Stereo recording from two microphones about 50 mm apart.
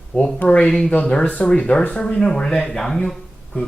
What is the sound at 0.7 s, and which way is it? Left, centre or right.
Speech, centre.